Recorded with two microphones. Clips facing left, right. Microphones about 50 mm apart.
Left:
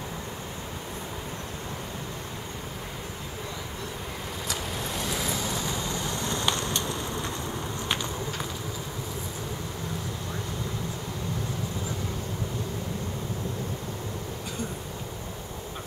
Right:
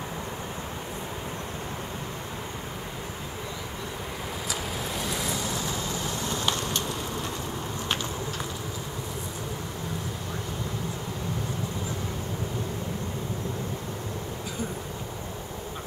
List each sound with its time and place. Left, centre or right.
4.5 s vehicle: centre
5.9 s vehicle: centre
6.7 s a sound: right